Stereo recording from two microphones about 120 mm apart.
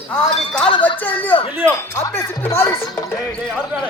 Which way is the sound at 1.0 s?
15° left (ahead or behind).